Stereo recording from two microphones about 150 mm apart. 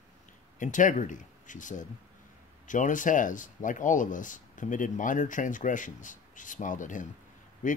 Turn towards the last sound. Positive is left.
turn(degrees=60)  # may be behind; listen again after turning